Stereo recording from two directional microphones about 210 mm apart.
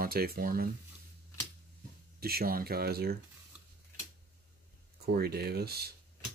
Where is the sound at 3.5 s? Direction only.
5° right (ahead or behind).